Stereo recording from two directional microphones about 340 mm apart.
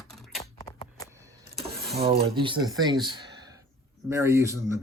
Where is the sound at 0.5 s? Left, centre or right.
Centre.